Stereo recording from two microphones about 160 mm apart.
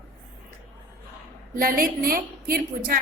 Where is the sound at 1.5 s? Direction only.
65° right (ahead or behind).